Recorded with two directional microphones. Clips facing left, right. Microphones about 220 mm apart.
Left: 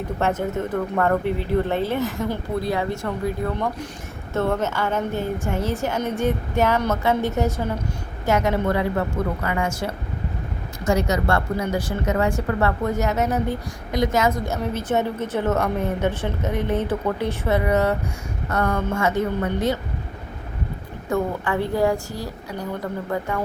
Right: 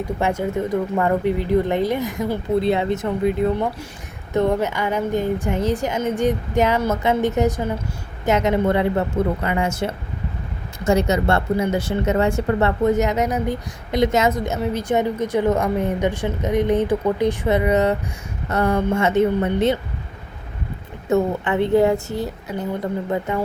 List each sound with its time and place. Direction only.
0.2 s speech: 10° right (ahead or behind)
21.1 s speech: 20° right (ahead or behind)